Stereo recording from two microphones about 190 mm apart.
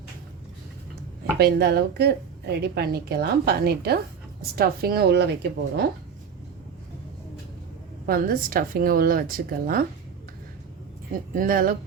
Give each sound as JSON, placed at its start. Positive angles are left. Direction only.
{"t": 1.4, "sound": "a woman's voice", "side_deg": -60}
{"t": 8.0, "sound": "speech", "side_deg": -50}
{"t": 11.3, "sound": "speech", "side_deg": -50}